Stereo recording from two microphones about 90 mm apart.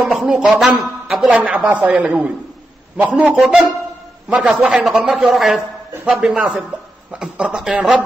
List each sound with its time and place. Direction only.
0.0 s a man's voice: centre (ahead or behind)
1.2 s a man's voice: 15° right (ahead or behind)
3.3 s a man's voice: 5° right (ahead or behind)